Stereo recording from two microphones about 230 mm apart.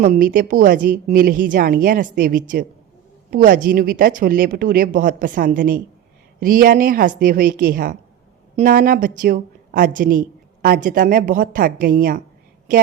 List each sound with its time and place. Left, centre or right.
0.0 s a woman's voice: right